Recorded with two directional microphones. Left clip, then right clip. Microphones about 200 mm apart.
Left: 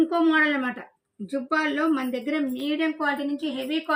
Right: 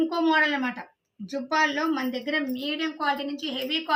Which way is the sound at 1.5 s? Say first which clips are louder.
Even; 50° right (ahead or behind).